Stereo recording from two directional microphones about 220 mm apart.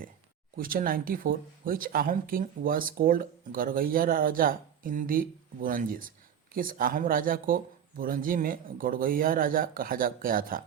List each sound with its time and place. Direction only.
0.5 s speech: 40° right (ahead or behind)